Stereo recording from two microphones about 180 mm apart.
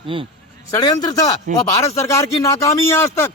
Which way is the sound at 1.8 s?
15° left (ahead or behind).